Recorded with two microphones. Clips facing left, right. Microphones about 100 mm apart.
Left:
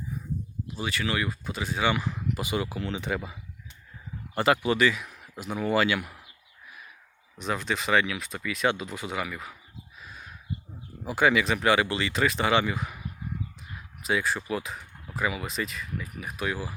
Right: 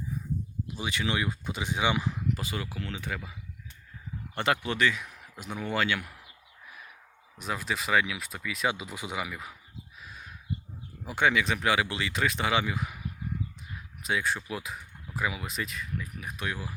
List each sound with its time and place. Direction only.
0.8 s speech: 20° right (ahead or behind)
2.3 s speech: 15° left (ahead or behind)
4.4 s speech: 5° left (ahead or behind)
7.3 s speech: 5° right (ahead or behind)
10.0 s a sound: centre (ahead or behind)
11.0 s speech: centre (ahead or behind)
14.0 s speech: centre (ahead or behind)